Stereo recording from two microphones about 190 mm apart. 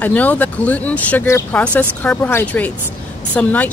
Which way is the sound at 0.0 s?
10° left (ahead or behind).